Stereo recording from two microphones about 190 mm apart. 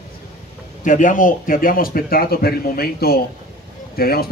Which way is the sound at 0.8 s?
45° left (ahead or behind).